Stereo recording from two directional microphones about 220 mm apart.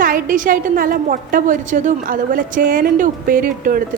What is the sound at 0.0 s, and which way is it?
A woman's voice, 40° right (ahead or behind).